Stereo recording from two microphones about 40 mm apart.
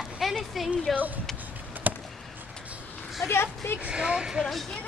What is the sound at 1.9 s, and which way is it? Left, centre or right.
Basketball bounce, right.